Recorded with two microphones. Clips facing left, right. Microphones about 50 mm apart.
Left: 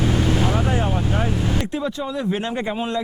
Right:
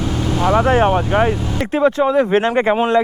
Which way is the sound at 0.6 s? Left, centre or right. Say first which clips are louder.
Right 8 dB; right.